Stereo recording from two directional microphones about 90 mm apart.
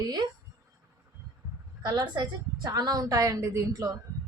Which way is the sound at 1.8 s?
50° right (ahead or behind).